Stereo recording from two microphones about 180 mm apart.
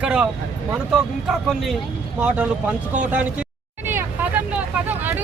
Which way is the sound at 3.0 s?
10° right (ahead or behind).